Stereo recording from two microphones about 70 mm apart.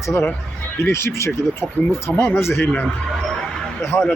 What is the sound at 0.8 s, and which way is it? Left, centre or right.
Speech, left.